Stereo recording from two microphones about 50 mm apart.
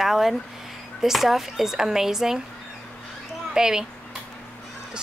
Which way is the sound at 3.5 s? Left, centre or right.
Centre.